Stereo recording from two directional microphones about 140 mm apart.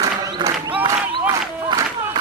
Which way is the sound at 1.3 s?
25° right (ahead or behind).